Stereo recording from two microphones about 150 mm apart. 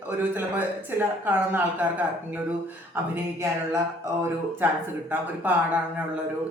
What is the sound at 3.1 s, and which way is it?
Speech, 20° right (ahead or behind).